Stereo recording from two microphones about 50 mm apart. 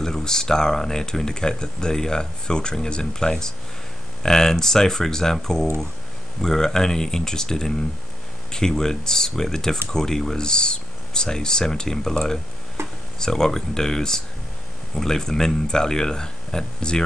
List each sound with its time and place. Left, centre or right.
0.0 s speech: centre
12.8 s tick-tock: right
13.2 s speech: centre